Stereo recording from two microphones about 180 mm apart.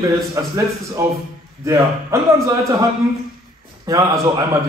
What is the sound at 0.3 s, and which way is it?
Speech, 15° right (ahead or behind).